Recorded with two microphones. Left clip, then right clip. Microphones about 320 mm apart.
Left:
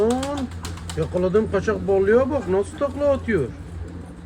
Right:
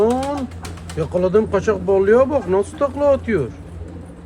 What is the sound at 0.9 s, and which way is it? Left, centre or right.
A man's voice, right.